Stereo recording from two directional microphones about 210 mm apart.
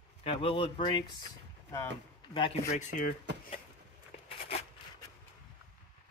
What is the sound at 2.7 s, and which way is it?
Speech, 35° left (ahead or behind).